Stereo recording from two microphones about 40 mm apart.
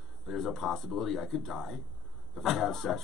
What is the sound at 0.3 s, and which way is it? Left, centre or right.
A man's voice, centre.